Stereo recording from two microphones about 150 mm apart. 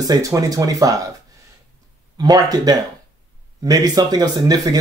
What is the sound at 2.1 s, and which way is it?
Speech, 25° right (ahead or behind).